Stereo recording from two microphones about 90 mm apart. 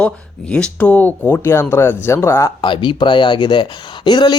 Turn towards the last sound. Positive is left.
turn(degrees=55)  # may be behind; listen again after turning